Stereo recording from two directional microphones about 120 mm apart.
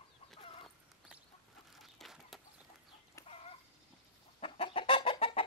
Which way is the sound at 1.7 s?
Centre (ahead or behind).